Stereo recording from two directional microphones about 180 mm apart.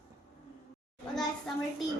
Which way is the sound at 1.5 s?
Centre (ahead or behind).